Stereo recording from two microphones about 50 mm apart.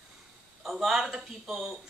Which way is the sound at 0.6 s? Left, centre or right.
Centre.